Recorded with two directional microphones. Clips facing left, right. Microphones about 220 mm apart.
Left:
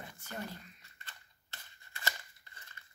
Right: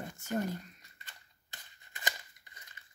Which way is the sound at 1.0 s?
15° right (ahead or behind).